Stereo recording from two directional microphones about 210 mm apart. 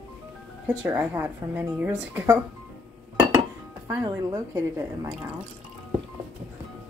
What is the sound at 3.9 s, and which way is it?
Speech, 15° right (ahead or behind).